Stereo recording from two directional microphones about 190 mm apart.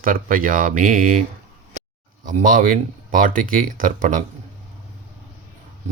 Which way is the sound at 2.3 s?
45° right (ahead or behind).